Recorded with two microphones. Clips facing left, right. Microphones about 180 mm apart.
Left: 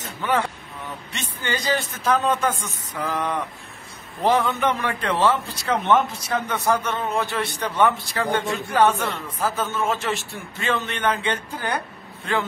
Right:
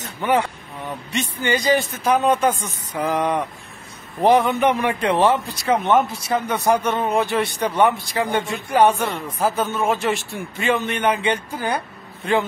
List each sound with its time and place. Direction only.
0.2 s a man's voice: 15° right (ahead or behind)